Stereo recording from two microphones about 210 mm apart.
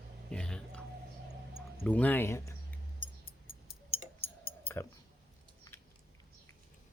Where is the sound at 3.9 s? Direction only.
25° left (ahead or behind).